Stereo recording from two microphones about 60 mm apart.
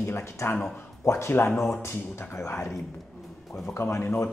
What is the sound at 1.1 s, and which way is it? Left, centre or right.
Speech, left.